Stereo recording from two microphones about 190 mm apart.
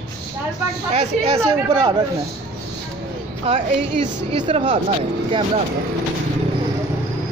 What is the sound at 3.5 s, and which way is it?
Speech, 25° right (ahead or behind).